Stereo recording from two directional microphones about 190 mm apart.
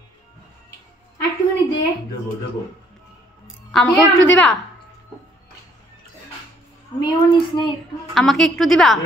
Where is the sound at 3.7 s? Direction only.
Centre (ahead or behind).